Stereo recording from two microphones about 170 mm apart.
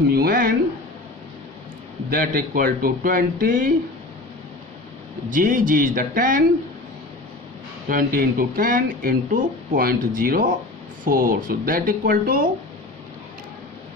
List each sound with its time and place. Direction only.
0.1 s speech: 60° right (ahead or behind)
2.0 s speech: 55° right (ahead or behind)
5.3 s speech: 55° right (ahead or behind)
7.9 s speech: 60° right (ahead or behind)